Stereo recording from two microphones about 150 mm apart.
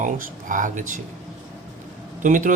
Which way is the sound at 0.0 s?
60° right (ahead or behind).